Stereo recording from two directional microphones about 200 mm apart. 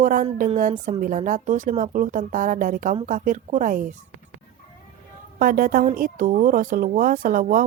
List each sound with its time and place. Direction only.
0.0 s a woman's voice: 45° right (ahead or behind)
5.4 s a woman's voice: 45° right (ahead or behind)